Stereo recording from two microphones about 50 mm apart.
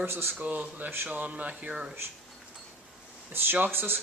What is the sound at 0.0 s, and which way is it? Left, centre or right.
Speech, right.